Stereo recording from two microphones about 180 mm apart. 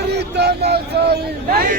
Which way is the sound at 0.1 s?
65° right (ahead or behind).